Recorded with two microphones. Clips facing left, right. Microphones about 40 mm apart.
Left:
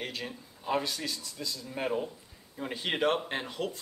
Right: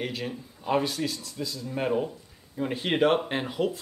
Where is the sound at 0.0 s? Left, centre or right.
Centre.